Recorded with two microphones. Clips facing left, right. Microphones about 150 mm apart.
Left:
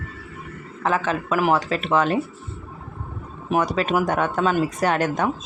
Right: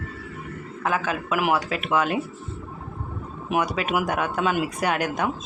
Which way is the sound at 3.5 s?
5° right (ahead or behind).